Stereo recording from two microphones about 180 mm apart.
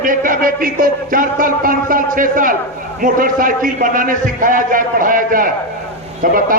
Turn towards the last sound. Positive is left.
turn(degrees=-50)  # may be behind; listen again after turning